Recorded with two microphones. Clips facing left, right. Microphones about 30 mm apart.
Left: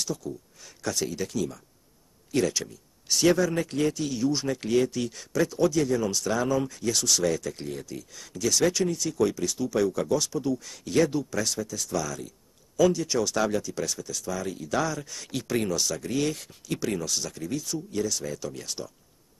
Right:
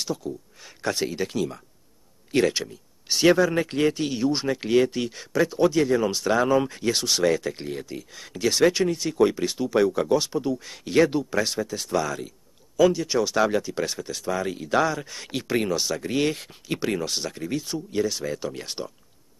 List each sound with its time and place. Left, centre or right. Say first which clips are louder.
0.0 s a man's voice: right 3 dB; right
12.7 s speech: right 3 dB; right